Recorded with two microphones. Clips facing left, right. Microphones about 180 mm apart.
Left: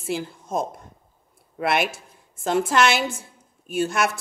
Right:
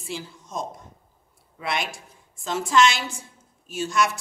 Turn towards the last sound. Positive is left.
turn(degrees=60)  # may be behind; listen again after turning